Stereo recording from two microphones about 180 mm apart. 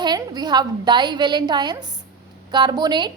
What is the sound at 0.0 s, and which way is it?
A woman's voice, 25° right (ahead or behind).